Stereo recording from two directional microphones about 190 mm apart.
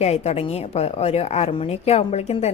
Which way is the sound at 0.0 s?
35° left (ahead or behind).